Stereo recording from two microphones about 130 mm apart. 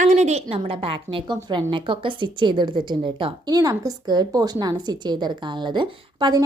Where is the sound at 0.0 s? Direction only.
65° right (ahead or behind).